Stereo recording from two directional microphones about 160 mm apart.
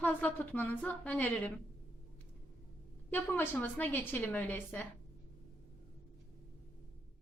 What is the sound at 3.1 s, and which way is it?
A woman's voice, 15° left (ahead or behind).